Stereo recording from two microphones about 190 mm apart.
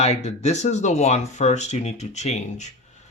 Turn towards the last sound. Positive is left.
turn(degrees=35)  # may be behind; listen again after turning